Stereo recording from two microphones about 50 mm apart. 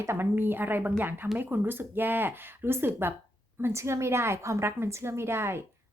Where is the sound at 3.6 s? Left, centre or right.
Right.